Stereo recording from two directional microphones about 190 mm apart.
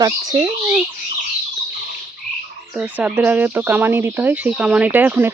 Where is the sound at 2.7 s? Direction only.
10° right (ahead or behind).